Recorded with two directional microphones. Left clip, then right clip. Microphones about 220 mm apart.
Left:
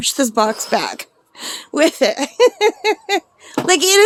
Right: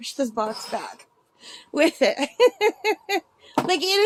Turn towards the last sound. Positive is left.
turn(degrees=30)  # may be behind; listen again after turning